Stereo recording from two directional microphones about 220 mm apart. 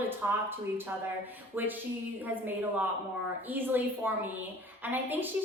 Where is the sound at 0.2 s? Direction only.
10° right (ahead or behind).